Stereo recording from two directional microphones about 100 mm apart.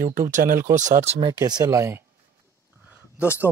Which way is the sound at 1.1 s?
50° right (ahead or behind).